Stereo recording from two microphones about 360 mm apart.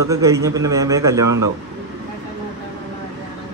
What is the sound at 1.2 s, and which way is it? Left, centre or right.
Speech, right.